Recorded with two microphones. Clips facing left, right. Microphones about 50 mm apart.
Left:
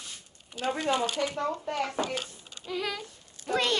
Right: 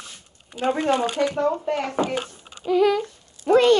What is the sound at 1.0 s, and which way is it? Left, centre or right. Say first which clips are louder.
Speech: right 8 dB; right.